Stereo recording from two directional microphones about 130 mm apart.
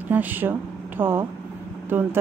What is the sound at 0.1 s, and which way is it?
Speech, 15° right (ahead or behind).